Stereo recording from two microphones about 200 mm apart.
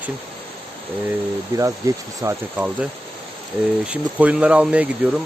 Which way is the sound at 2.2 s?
15° right (ahead or behind).